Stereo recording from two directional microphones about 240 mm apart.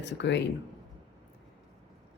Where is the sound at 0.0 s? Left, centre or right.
Left.